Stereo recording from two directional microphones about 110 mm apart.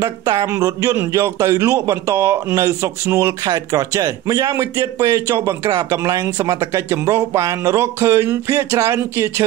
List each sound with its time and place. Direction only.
0.0 s a man's voice: 30° right (ahead or behind)
3.4 s a man's voice: 35° right (ahead or behind)